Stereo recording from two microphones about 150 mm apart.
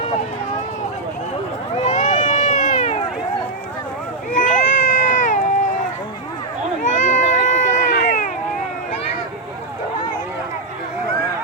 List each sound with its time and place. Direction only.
1.8 s run: 50° left (ahead or behind)
4.3 s a sound: 55° left (ahead or behind)
6.8 s run: 55° left (ahead or behind)